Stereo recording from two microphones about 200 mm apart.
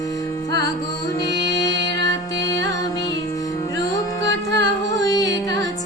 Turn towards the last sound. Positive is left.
turn(degrees=20)  # may be behind; listen again after turning